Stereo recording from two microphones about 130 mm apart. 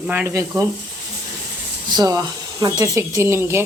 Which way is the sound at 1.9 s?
30° right (ahead or behind).